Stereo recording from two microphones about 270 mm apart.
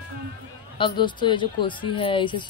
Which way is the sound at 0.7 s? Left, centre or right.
Centre.